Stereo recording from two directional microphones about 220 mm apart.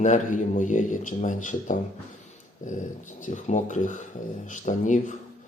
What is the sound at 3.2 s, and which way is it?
A man's voice, 35° left (ahead or behind).